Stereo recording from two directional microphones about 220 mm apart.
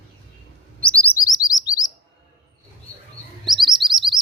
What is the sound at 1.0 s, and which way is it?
Chirp, 15° left (ahead or behind).